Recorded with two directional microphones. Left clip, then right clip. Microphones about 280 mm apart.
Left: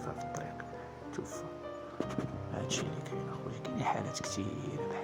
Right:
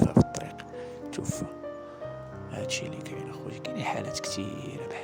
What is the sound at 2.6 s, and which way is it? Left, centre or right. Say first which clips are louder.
Speech: right 5 dB; right.